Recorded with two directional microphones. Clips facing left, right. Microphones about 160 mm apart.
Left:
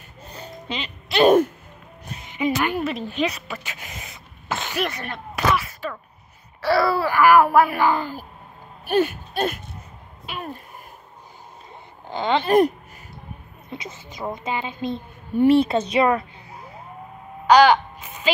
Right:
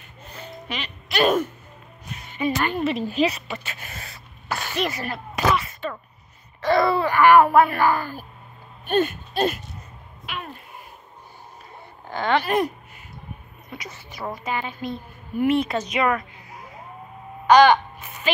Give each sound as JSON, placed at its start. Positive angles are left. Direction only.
{"t": 0.2, "sound": "music", "side_deg": 35}
{"t": 2.2, "sound": "a woman's voice", "side_deg": 15}
{"t": 2.8, "sound": "a woman's voice", "side_deg": 0}
{"t": 3.6, "sound": "sneeze", "side_deg": 15}
{"t": 4.7, "sound": "a sound", "side_deg": 0}
{"t": 6.6, "sound": "speech", "side_deg": 5}
{"t": 7.8, "sound": "speech", "side_deg": 15}
{"t": 10.2, "sound": "a sound", "side_deg": 35}
{"t": 12.1, "sound": "speech", "side_deg": 20}
{"t": 13.7, "sound": "a woman's voice", "side_deg": 25}
{"t": 17.5, "sound": "a sound", "side_deg": 10}